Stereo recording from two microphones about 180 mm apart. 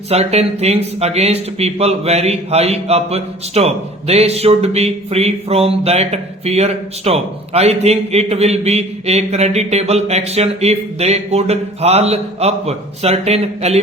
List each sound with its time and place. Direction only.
0.1 s speech: 35° right (ahead or behind)